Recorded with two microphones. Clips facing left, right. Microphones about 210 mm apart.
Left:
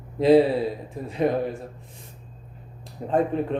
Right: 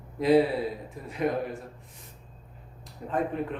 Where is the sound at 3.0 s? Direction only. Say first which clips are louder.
Left 8 dB; 30° left (ahead or behind).